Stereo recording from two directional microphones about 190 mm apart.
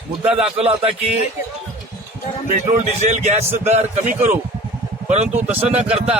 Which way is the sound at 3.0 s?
40° right (ahead or behind).